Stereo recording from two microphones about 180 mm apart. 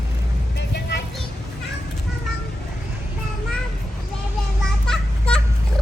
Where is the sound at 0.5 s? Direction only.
70° left (ahead or behind).